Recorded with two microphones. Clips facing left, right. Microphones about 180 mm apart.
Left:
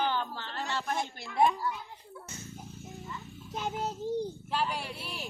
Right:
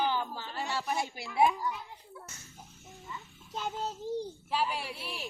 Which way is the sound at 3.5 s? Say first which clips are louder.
Left 2 dB; 15° left (ahead or behind).